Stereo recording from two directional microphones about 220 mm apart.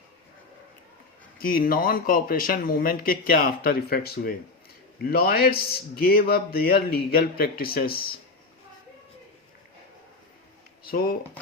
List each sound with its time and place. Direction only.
1.4 s a man's voice: 40° left (ahead or behind)
10.8 s speech: 40° left (ahead or behind)